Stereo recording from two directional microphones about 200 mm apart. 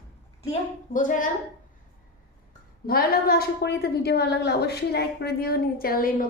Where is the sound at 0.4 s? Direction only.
35° left (ahead or behind).